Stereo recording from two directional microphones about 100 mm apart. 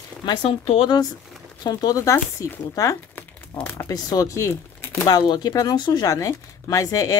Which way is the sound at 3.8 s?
40° left (ahead or behind).